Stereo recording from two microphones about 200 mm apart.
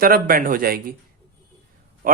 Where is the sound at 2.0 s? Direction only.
45° right (ahead or behind).